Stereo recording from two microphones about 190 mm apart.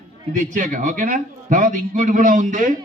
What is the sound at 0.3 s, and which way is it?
A man's voice, 40° right (ahead or behind).